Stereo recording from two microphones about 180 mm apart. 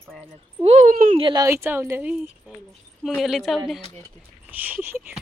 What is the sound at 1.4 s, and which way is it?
Speech, 15° right (ahead or behind).